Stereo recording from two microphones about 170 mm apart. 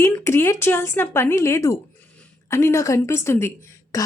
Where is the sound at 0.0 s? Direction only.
15° left (ahead or behind).